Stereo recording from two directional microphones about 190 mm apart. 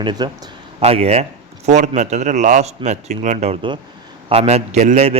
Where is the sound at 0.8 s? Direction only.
35° right (ahead or behind).